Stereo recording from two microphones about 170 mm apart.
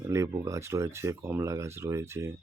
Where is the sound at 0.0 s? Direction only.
20° right (ahead or behind).